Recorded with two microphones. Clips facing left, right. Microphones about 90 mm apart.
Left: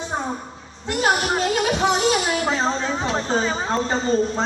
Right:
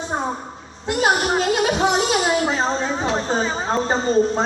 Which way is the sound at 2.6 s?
15° right (ahead or behind).